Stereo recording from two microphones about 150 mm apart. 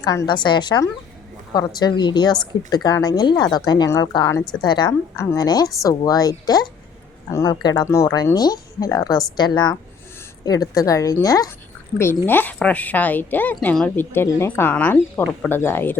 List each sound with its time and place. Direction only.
0.0 s a woman's voice: 25° left (ahead or behind)